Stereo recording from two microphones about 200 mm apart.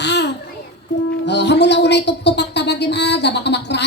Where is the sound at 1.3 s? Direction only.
60° left (ahead or behind).